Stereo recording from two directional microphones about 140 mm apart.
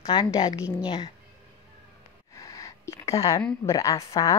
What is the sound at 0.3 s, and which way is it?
Speech, 25° left (ahead or behind).